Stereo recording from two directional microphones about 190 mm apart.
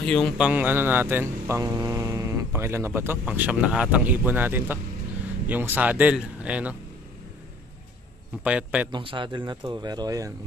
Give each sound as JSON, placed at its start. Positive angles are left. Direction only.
{"t": 0.0, "sound": "speech", "side_deg": 0}
{"t": 8.5, "sound": "speech", "side_deg": -5}
{"t": 8.9, "sound": "speech", "side_deg": -25}